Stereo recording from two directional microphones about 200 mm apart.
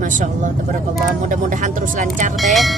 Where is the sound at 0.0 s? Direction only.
40° right (ahead or behind).